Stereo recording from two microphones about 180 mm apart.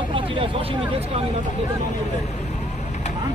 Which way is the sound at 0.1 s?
30° right (ahead or behind).